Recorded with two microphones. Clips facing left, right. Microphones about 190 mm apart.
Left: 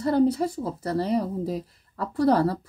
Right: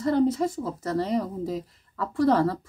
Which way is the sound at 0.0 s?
35° left (ahead or behind).